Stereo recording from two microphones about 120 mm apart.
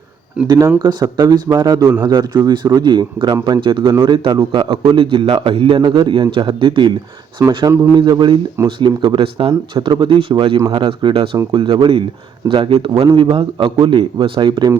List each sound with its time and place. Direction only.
0.4 s a man's voice: 30° right (ahead or behind)
7.9 s a man's voice: 40° right (ahead or behind)